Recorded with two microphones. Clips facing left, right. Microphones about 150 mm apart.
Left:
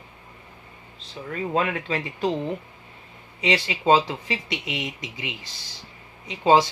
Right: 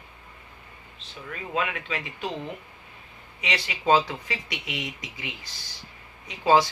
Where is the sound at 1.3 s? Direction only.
35° left (ahead or behind).